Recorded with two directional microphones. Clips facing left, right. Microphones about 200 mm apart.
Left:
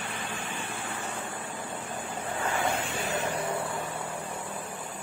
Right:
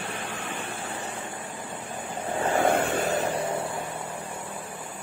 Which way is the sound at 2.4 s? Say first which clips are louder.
Right 8 dB; 45° right (ahead or behind).